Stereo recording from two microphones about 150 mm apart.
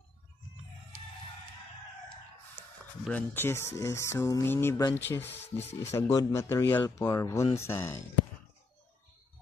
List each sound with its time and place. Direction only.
3.1 s speech: 10° left (ahead or behind)